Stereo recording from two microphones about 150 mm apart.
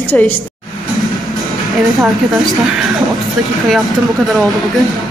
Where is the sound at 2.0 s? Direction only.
Centre (ahead or behind).